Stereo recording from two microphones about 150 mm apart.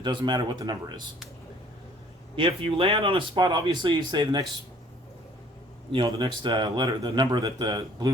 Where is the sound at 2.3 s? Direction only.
35° right (ahead or behind).